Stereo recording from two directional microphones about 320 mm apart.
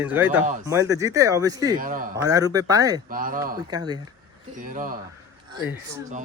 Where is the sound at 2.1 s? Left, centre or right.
Centre.